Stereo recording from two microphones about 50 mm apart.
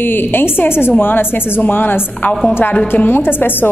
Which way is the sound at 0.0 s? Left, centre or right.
Left.